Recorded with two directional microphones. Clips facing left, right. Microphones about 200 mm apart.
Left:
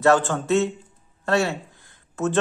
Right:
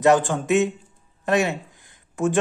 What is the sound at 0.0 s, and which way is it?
Speech, 15° right (ahead or behind).